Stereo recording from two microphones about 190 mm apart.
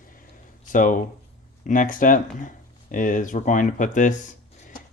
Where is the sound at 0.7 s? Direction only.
45° left (ahead or behind).